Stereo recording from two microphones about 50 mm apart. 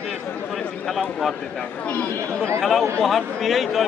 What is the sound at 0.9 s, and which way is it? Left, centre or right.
Speech, centre.